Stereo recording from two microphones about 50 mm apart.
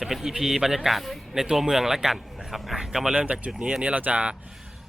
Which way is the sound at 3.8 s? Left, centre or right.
Right.